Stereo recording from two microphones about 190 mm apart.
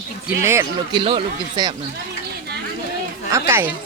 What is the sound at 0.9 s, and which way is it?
Speech, 25° right (ahead or behind).